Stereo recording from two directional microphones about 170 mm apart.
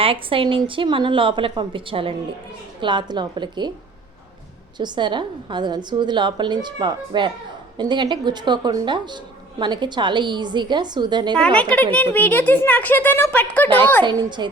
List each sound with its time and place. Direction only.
0.0 s a woman's voice: 30° right (ahead or behind)
4.8 s a woman's voice: 25° right (ahead or behind)
11.3 s speech: 5° left (ahead or behind)
14.0 s a woman's voice: 25° right (ahead or behind)